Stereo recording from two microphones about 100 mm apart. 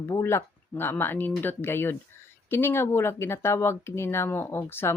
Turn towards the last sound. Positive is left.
turn(degrees=25)  # may be behind; listen again after turning